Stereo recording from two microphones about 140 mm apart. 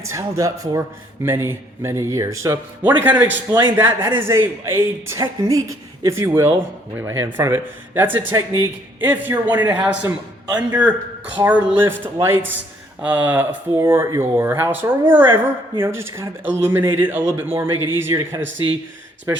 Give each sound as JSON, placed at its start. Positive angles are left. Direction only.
{"t": 0.0, "sound": "a man's voice", "side_deg": -20}